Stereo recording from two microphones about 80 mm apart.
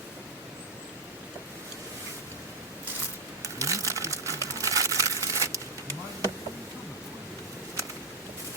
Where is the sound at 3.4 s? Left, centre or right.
Right.